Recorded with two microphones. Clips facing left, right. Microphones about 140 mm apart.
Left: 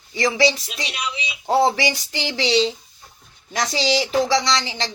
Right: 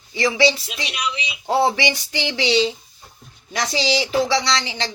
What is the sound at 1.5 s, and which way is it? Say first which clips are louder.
Speech: left 1 dB; 40° left (ahead or behind).